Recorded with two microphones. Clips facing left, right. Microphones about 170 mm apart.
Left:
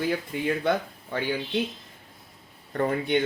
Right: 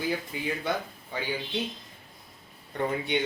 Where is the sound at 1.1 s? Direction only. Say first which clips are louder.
Left 5 dB; 55° left (ahead or behind).